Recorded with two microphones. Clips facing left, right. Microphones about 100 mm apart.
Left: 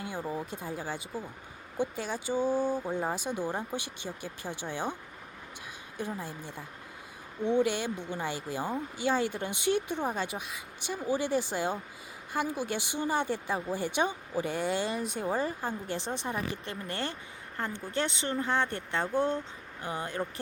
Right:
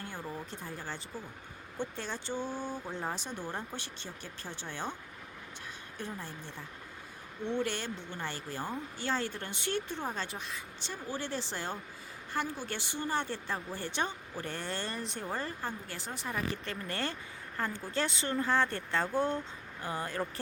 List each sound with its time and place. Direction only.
0.0 s speech: 10° left (ahead or behind)
6.0 s speech: 15° left (ahead or behind)